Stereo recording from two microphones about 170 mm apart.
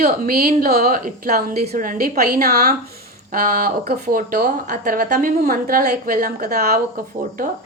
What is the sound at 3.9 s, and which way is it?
Speech, 45° right (ahead or behind).